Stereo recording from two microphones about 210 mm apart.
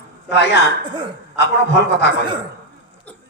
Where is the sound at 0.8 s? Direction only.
25° right (ahead or behind).